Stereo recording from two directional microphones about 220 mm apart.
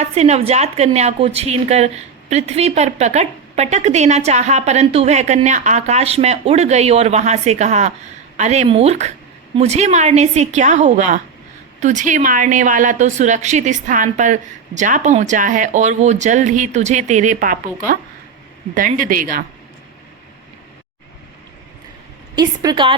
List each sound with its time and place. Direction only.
0.0 s a woman's voice: 30° right (ahead or behind)
22.4 s speech: 20° right (ahead or behind)